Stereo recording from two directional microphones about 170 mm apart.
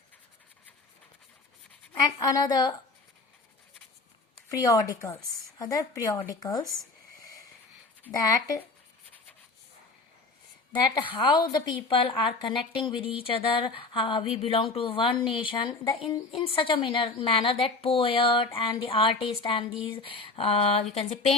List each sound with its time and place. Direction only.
1.9 s speech: 20° left (ahead or behind)
4.4 s speech: 20° left (ahead or behind)
8.0 s speech: 20° left (ahead or behind)
10.7 s a woman's voice: 30° left (ahead or behind)